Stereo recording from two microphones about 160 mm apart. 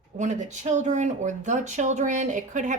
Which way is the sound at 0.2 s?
45° right (ahead or behind).